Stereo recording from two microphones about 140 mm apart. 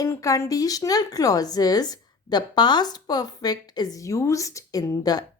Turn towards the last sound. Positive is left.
turn(degrees=25)  # may be behind; listen again after turning